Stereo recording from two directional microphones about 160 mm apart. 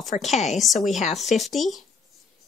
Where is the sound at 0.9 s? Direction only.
45° left (ahead or behind).